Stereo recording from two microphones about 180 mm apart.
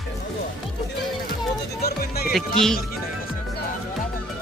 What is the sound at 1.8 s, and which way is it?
Music, 60° left (ahead or behind).